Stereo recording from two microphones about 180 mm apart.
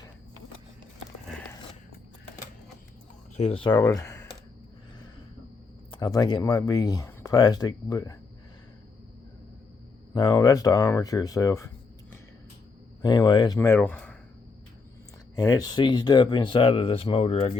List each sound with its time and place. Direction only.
3.3 s speech: 35° left (ahead or behind)
4.0 s a sound: 15° left (ahead or behind)
5.9 s speech: 20° left (ahead or behind)
10.2 s speech: 20° left (ahead or behind)
13.0 s speech: 25° left (ahead or behind)
13.6 s speech: 10° left (ahead or behind)
15.4 s speech: 20° left (ahead or behind)